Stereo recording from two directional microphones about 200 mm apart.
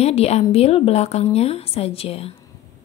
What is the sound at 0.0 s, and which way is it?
A woman's voice, 30° left (ahead or behind).